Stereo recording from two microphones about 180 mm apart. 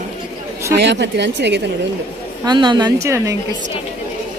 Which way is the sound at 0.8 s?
75° right (ahead or behind).